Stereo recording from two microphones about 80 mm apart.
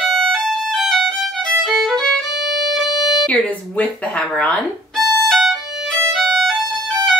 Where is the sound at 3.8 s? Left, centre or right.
Centre.